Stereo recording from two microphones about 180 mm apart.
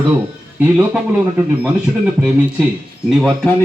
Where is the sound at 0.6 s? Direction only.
10° right (ahead or behind).